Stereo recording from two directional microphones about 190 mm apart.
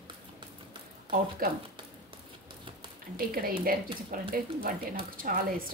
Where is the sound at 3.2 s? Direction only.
50° right (ahead or behind).